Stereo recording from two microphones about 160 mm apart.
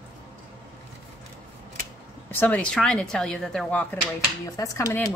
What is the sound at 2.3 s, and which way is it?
A woman's voice, 10° left (ahead or behind).